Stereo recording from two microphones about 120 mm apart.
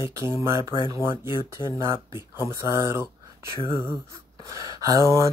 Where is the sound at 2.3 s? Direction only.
25° right (ahead or behind).